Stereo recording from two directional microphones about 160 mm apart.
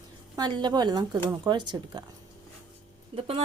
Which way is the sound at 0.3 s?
30° right (ahead or behind).